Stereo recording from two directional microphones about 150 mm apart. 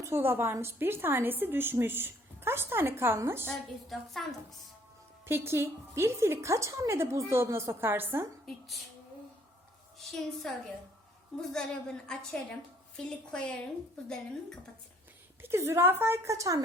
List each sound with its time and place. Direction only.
0.0 s a woman's voice: 15° right (ahead or behind)
3.5 s a woman's voice: centre (ahead or behind)
5.2 s a woman's voice: 15° right (ahead or behind)
8.4 s a woman's voice: centre (ahead or behind)
10.1 s a woman's voice: centre (ahead or behind)
15.4 s a woman's voice: 15° right (ahead or behind)